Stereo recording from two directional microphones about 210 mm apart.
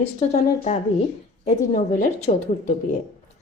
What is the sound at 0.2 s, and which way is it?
Speech, 35° left (ahead or behind).